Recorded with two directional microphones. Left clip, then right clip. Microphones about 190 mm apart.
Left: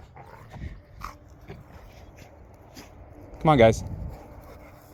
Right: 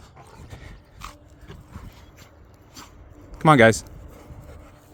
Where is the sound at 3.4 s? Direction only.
45° right (ahead or behind).